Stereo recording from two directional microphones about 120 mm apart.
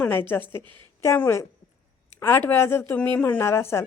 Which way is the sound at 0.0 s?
15° left (ahead or behind).